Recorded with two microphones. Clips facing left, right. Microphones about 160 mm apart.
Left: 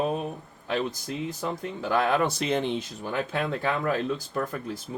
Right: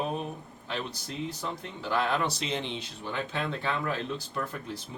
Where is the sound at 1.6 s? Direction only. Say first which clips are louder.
Left 4 dB; 50° left (ahead or behind).